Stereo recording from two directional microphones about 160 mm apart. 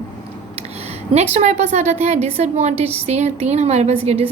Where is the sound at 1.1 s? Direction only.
40° right (ahead or behind).